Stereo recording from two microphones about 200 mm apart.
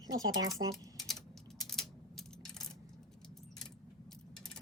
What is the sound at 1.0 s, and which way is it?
Coin, centre (ahead or behind).